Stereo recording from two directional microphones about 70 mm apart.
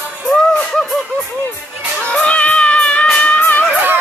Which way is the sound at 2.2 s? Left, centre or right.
Centre.